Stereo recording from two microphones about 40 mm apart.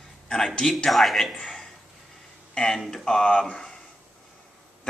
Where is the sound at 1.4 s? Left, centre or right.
Centre.